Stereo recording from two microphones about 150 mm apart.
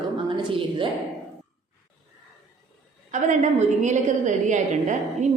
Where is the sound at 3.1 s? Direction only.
55° right (ahead or behind).